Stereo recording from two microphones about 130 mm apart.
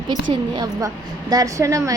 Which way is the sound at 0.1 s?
35° right (ahead or behind).